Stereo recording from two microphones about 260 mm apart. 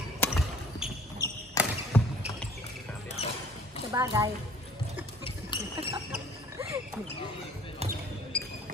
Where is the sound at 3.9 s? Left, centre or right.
Centre.